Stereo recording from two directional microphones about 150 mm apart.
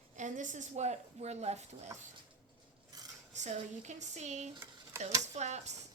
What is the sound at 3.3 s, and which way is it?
A woman's voice, 50° right (ahead or behind).